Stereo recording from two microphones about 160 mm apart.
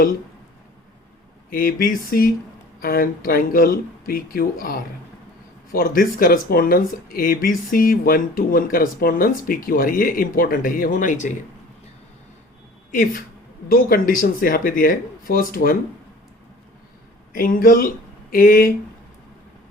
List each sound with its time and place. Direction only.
1.5 s speech: 65° left (ahead or behind)
12.9 s speech: 60° left (ahead or behind)
17.3 s speech: 60° left (ahead or behind)